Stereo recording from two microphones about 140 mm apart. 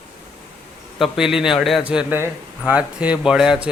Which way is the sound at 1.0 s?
5° right (ahead or behind).